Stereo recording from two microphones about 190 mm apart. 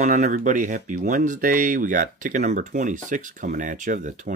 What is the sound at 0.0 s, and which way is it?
Speech, 40° right (ahead or behind).